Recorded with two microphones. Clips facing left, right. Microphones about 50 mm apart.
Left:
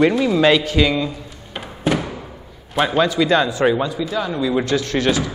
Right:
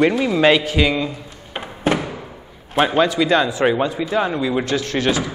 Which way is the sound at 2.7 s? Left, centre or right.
Centre.